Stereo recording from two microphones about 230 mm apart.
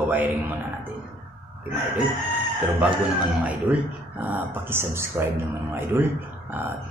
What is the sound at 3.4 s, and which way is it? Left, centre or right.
Speech, centre.